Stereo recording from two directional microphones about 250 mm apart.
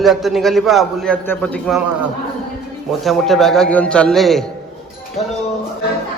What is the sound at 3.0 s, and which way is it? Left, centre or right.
A man's voice, centre.